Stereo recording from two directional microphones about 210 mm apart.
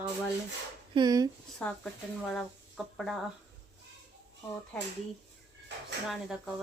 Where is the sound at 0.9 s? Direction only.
20° right (ahead or behind).